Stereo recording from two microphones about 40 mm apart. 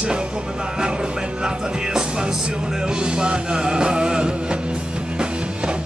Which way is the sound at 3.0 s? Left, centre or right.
Right.